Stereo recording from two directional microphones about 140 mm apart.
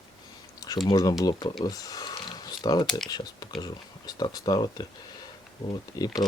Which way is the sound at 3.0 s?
30° left (ahead or behind).